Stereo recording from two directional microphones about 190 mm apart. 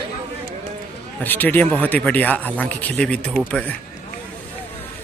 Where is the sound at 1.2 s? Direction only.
10° left (ahead or behind).